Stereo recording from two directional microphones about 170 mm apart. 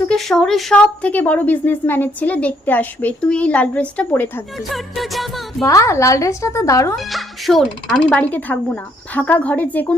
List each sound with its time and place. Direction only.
0.1 s a woman's voice: centre (ahead or behind)
4.7 s music: centre (ahead or behind)
5.6 s a woman's voice: 20° left (ahead or behind)
6.9 s a woman's voice: centre (ahead or behind)